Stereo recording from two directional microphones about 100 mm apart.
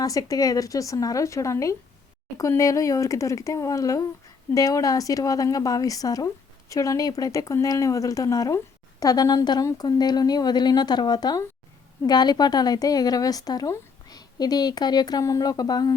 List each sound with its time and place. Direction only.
0.0 s speech: 35° left (ahead or behind)